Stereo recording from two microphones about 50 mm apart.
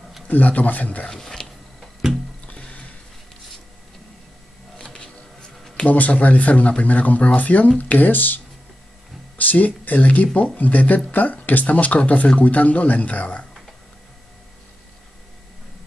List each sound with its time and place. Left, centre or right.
0.3 s speech: left
1.0 s a sound: centre
2.4 s music: left
4.7 s a sound: centre
5.9 s speech: left
9.4 s speech: left